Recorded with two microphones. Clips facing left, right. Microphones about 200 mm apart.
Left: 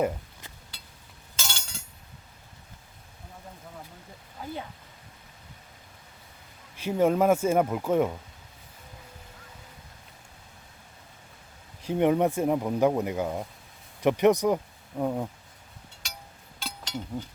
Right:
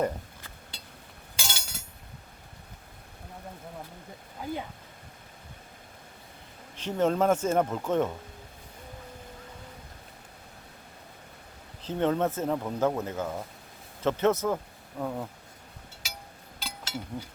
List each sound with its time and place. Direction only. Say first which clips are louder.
1.4 s glass: even; 10° right (ahead or behind)
6.7 s speech: left 3 dB; 10° left (ahead or behind)
11.8 s speech: left 4 dB; 15° left (ahead or behind)
16.0 s music: right 1 dB; 5° right (ahead or behind)
16.6 s a sound: left 2 dB; 5° right (ahead or behind)